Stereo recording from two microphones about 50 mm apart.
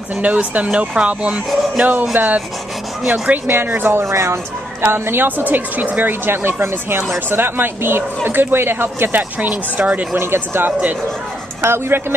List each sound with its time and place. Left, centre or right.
0.1 s speech: right
2.1 s rub: right
3.4 s speech: right
4.0 s speech: right
4.8 s speech: right
10.1 s speech: right